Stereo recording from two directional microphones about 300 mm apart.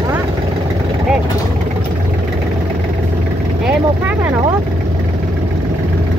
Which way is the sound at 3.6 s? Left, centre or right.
Centre.